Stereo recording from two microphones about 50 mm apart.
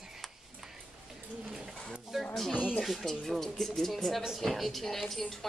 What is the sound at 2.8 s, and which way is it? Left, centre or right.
A woman's voice, centre.